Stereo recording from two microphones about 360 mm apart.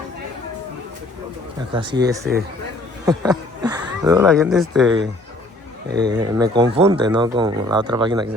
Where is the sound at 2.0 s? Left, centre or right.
Centre.